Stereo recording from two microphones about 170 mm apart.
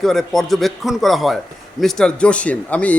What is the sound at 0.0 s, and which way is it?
A man's voice, centre (ahead or behind).